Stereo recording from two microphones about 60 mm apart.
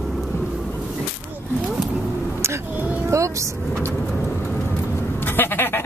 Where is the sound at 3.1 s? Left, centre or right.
Right.